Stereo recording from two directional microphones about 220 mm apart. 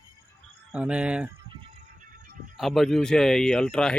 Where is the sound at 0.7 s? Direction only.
5° right (ahead or behind).